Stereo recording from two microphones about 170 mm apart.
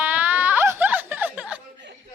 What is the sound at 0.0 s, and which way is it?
Music, 10° right (ahead or behind).